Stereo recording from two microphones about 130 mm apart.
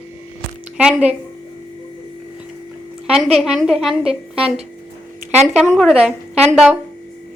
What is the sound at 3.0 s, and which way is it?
A woman's voice, 5° right (ahead or behind).